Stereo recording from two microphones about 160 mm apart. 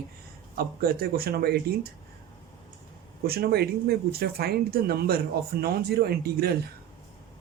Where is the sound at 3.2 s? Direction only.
75° right (ahead or behind).